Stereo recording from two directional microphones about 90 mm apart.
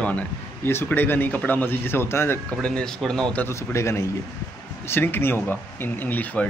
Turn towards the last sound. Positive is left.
turn(degrees=20)  # may be behind; listen again after turning